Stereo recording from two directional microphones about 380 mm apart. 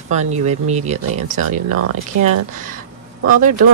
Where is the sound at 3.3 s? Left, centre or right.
Right.